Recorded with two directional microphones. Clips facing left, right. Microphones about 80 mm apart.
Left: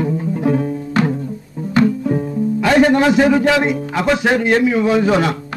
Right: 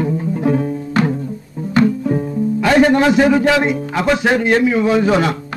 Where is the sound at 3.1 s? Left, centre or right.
Right.